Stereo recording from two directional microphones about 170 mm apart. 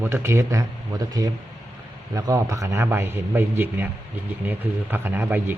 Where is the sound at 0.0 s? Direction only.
15° right (ahead or behind).